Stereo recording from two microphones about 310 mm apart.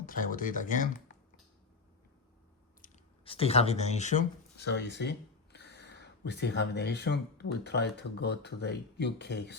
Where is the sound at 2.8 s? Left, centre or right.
Centre.